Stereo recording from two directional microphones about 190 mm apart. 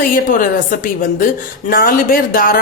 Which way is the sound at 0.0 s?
45° left (ahead or behind).